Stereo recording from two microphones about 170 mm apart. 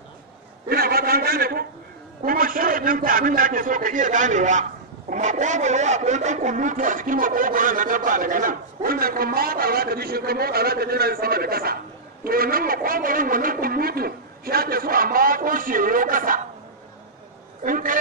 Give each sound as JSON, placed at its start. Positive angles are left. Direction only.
{"t": 0.7, "sound": "a sound", "side_deg": -65}
{"t": 2.2, "sound": "a man's voice", "side_deg": -55}
{"t": 17.6, "sound": "a man's voice", "side_deg": -55}